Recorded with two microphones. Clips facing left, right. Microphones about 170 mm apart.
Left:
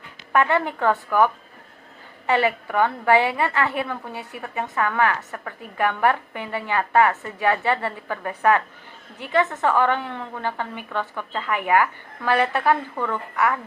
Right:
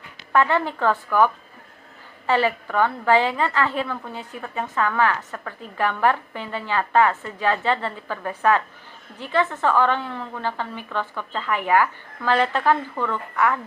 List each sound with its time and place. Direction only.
0.3 s a woman's voice: 15° left (ahead or behind)